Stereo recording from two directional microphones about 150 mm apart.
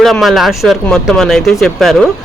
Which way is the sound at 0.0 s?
Centre (ahead or behind).